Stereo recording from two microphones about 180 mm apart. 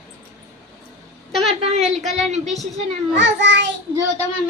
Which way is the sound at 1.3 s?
Centre (ahead or behind).